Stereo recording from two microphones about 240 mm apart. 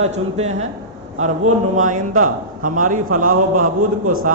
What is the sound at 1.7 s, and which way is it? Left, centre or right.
A man's voice, right.